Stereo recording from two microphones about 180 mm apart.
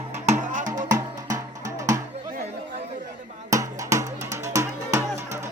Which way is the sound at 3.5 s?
20° right (ahead or behind).